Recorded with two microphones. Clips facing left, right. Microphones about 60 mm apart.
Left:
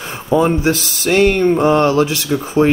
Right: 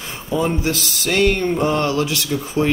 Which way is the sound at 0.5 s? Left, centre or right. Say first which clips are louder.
Left 5 dB; left.